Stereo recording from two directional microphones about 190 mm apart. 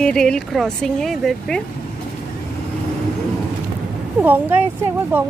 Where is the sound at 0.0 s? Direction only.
5° left (ahead or behind).